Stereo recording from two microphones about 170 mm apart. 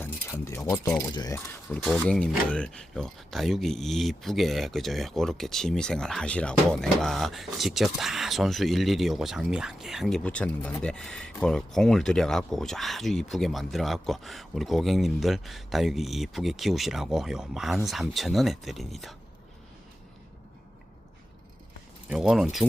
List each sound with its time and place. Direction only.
0.0 s keys jangling: 15° left (ahead or behind)
1.7 s speech: centre (ahead or behind)
22.1 s speech: 5° right (ahead or behind)